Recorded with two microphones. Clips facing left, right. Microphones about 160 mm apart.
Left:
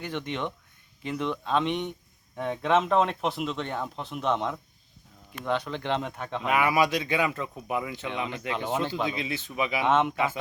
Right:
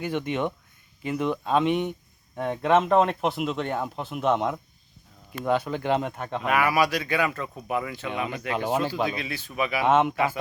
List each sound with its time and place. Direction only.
0.0 s speech: 10° right (ahead or behind)
6.4 s speech: 20° left (ahead or behind)
8.3 s speech: 5° right (ahead or behind)
9.1 s speech: 20° left (ahead or behind)
9.8 s speech: 5° right (ahead or behind)